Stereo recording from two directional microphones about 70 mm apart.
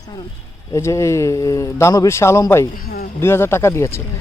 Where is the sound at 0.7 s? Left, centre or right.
Left.